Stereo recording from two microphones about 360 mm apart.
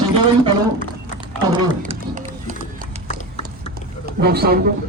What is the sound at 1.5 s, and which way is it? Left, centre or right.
Run, centre.